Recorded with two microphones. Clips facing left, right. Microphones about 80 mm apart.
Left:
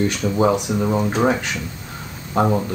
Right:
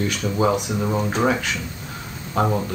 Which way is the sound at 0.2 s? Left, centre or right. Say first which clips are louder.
Left 2 dB; left.